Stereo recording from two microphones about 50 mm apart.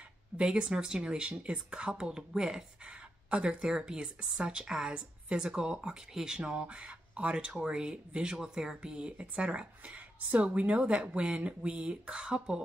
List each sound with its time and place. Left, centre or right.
0.4 s speech: centre
2.9 s speech: right